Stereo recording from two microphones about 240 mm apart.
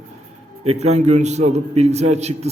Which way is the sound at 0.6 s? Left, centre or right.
Right.